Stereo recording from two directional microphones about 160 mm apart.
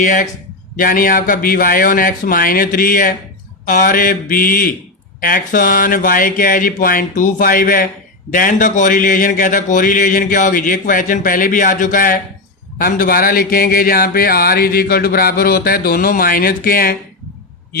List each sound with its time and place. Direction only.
0.0 s speech: 50° left (ahead or behind)